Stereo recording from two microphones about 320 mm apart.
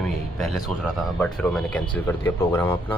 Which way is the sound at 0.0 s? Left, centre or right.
Centre.